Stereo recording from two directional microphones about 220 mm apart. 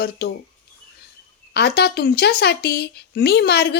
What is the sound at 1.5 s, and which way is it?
A woman's voice, 50° left (ahead or behind).